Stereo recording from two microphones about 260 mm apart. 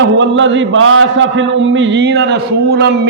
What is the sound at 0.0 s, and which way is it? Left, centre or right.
A man's voice, right.